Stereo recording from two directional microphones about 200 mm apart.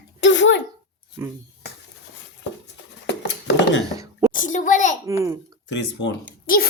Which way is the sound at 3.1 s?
55° left (ahead or behind).